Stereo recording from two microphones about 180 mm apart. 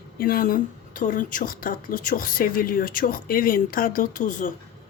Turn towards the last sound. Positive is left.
turn(degrees=50)  # may be behind; listen again after turning